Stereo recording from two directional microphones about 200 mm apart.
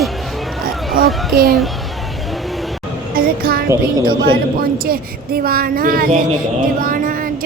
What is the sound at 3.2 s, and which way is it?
Speech, 45° right (ahead or behind).